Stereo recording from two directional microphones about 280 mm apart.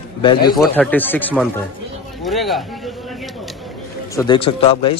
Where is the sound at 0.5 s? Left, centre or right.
Centre.